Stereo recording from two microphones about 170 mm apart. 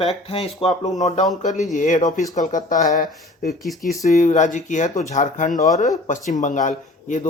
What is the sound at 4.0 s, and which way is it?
Speech, 45° left (ahead or behind).